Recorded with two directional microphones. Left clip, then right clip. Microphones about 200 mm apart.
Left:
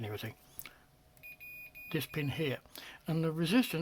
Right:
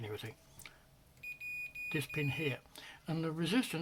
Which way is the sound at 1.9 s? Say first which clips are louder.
Left 2 dB; 40° left (ahead or behind).